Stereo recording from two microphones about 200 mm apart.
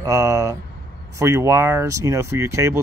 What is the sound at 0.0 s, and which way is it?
Speech, 15° right (ahead or behind).